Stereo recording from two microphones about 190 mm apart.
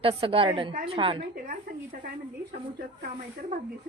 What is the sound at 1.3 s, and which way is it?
Speech, 45° right (ahead or behind).